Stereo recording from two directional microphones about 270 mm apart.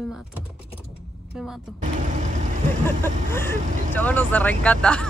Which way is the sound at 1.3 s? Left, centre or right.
Centre.